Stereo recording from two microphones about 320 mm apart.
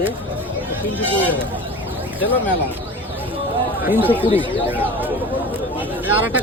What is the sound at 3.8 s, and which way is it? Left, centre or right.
Speech, centre.